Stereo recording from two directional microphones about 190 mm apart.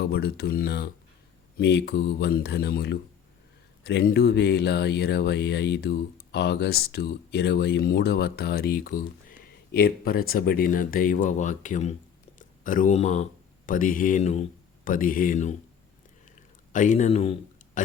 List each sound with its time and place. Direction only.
0.0 s speech: 60° left (ahead or behind); by 15.5 s 40° left (ahead or behind)
16.7 s speech: 40° left (ahead or behind)